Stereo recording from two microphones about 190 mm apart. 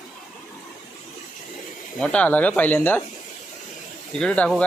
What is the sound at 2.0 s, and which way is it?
Speech, 5° left (ahead or behind).